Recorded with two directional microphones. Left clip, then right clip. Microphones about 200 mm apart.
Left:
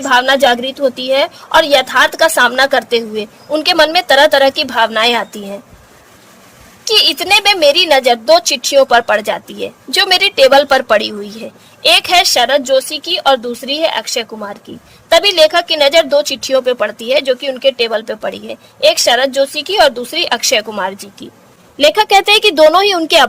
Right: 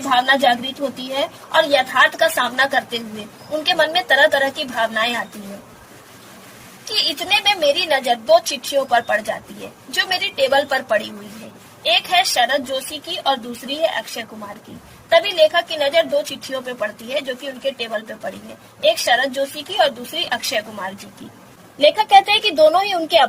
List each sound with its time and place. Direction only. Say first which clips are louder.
0.3 s a woman's voice: left 5 dB; 55° left (ahead or behind)
6.8 s a woman's voice: left 9 dB; 55° left (ahead or behind)
21.8 s a woman's voice: left 3 dB; 35° left (ahead or behind)